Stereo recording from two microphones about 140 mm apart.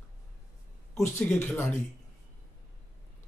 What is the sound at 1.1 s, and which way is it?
Speech, 15° left (ahead or behind).